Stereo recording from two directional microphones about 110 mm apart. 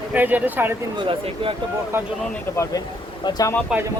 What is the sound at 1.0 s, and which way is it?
Speech, 55° right (ahead or behind).